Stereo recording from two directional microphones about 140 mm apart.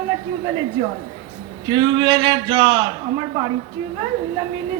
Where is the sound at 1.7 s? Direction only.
35° right (ahead or behind).